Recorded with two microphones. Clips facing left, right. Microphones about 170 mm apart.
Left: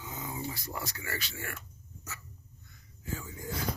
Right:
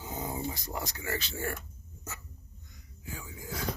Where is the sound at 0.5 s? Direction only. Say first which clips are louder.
Right 2 dB; 20° right (ahead or behind).